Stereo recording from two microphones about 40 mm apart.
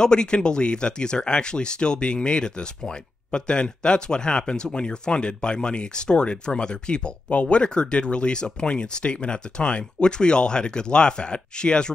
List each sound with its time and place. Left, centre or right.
0.0 s speech: left